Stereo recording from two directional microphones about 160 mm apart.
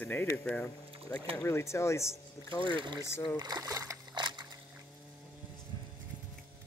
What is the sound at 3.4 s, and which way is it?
Splash, 20° right (ahead or behind).